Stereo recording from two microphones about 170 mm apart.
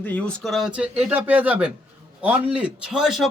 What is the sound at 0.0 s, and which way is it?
A man's voice, 10° left (ahead or behind).